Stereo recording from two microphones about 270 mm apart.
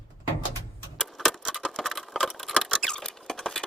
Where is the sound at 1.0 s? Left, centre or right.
Centre.